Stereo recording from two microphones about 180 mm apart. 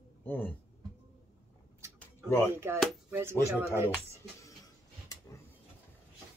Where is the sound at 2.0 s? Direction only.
10° left (ahead or behind).